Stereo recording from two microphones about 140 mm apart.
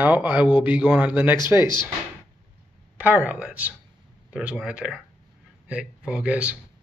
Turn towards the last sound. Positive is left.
turn(degrees=-10)  # may be behind; listen again after turning